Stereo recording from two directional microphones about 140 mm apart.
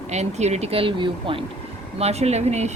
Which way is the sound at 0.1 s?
55° right (ahead or behind).